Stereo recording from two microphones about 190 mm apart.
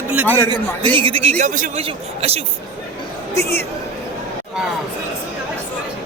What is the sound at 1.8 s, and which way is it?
Speech, 30° right (ahead or behind).